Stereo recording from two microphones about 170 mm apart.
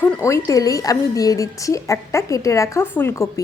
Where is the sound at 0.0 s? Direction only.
15° left (ahead or behind).